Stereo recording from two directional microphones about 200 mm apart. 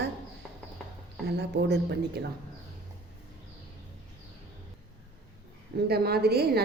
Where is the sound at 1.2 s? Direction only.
55° right (ahead or behind).